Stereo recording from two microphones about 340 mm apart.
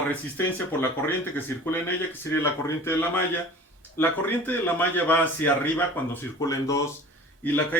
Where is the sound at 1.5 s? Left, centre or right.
Centre.